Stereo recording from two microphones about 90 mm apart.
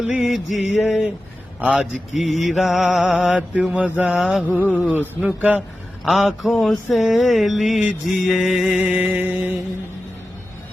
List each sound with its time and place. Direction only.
0.2 s mantra: centre (ahead or behind); by 4.2 s 20° right (ahead or behind)
4.2 s mantra: 5° right (ahead or behind)
4.6 s speech: 20° left (ahead or behind)
5.2 s mantra: 15° right (ahead or behind)
6.1 s mantra: centre (ahead or behind)
8.8 s mantra: 15° right (ahead or behind)